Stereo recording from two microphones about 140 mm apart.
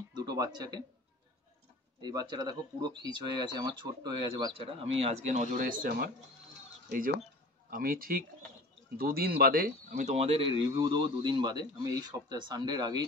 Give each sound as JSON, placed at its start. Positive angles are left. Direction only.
{"t": 0.1, "sound": "a sound", "side_deg": -30}
{"t": 2.0, "sound": "speech", "side_deg": -30}
{"t": 7.7, "sound": "speech", "side_deg": -90}
{"t": 10.8, "sound": "speech", "side_deg": -30}